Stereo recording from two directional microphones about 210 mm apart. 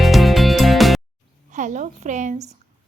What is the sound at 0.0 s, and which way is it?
Music, centre (ahead or behind).